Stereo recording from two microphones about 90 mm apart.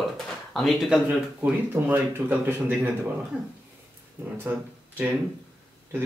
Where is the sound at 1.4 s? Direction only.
25° right (ahead or behind).